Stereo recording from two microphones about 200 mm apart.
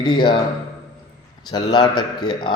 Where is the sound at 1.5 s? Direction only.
20° left (ahead or behind).